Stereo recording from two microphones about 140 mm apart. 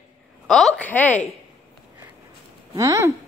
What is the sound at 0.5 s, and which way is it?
Speech, 5° left (ahead or behind).